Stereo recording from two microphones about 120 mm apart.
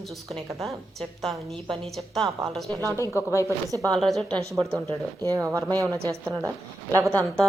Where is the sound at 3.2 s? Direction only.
25° left (ahead or behind).